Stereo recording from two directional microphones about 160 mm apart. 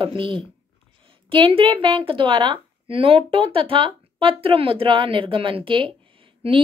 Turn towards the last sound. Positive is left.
turn(degrees=-35)  # may be behind; listen again after turning